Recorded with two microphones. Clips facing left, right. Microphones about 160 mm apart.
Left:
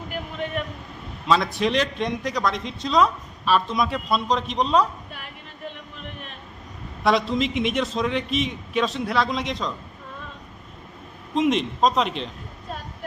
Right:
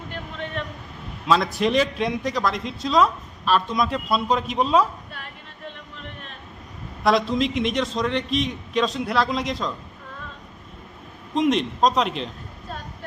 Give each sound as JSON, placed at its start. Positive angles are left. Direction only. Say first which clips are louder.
{"t": 0.1, "sound": "vehicle", "louder": "left 3 dB", "side_deg": 10}
{"t": 1.3, "sound": "speech", "louder": "right 1 dB", "side_deg": 0}
{"t": 7.0, "sound": "speech", "louder": "right 1 dB", "side_deg": 0}
{"t": 11.3, "sound": "speech", "louder": "right 1 dB", "side_deg": 0}